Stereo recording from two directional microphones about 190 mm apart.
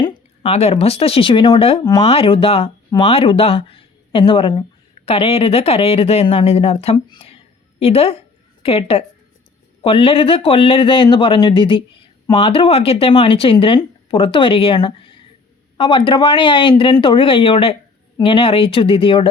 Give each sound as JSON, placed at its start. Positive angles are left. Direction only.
{"t": 0.0, "sound": "speech", "side_deg": 25}